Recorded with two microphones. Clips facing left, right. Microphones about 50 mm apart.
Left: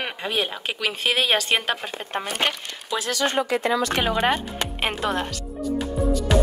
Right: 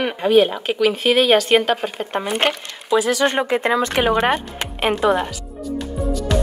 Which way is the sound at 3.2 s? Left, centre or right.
Right.